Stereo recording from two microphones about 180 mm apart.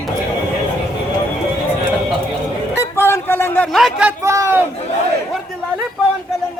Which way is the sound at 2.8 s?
15° left (ahead or behind).